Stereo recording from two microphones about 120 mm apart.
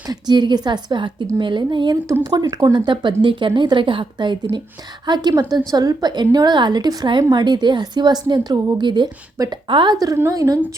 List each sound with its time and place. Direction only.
0.1 s a woman's voice: 40° right (ahead or behind)
2.7 s a woman's voice: 40° right (ahead or behind)